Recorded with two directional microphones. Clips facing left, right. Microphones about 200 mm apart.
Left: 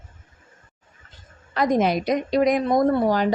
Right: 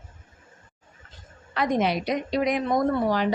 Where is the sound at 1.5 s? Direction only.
40° left (ahead or behind).